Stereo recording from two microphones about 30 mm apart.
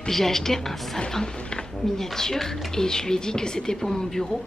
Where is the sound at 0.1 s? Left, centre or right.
Centre.